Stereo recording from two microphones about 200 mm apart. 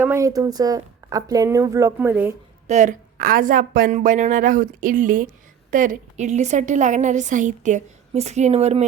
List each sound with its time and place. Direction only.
0.0 s speech: 15° right (ahead or behind)
2.6 s a woman's voice: 35° right (ahead or behind)